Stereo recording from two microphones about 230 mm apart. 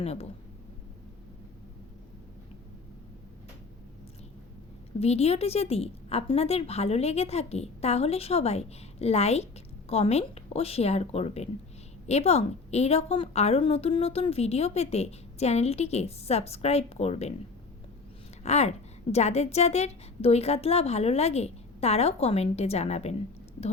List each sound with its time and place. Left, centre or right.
0.0 s a woman's voice: left
4.9 s a woman's voice: left
18.4 s a woman's voice: left